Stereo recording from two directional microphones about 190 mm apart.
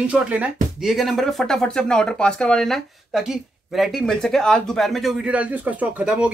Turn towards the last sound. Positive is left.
turn(degrees=-5)  # may be behind; listen again after turning